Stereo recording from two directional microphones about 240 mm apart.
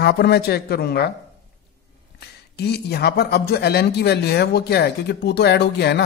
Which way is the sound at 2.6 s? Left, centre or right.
Left.